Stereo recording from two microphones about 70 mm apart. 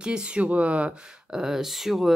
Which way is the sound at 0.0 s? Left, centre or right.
Centre.